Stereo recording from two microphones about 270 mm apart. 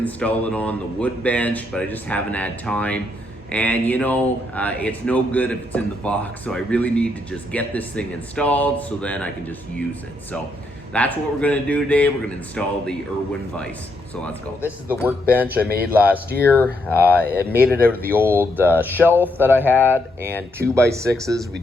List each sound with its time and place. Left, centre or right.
0.0 s speech: centre
10.9 s speech: centre
14.2 s speech: centre
15.0 s speech: centre
16.4 s speech: centre
16.9 s speech: centre
17.2 s speech: right
17.7 s speech: centre
18.2 s speech: centre